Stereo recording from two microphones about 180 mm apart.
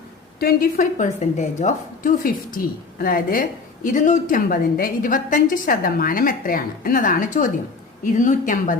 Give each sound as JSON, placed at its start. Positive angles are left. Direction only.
{"t": 0.3, "sound": "a woman's voice", "side_deg": 55}